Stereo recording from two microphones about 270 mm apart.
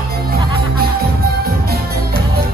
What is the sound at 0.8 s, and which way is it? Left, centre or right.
Music, right.